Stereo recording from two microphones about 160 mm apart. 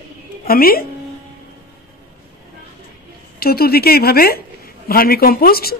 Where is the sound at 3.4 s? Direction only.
75° left (ahead or behind).